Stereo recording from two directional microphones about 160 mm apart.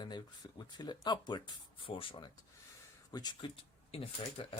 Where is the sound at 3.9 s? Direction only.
35° left (ahead or behind).